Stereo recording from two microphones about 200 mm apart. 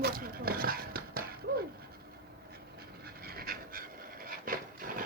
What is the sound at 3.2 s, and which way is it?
Pant, 50° right (ahead or behind).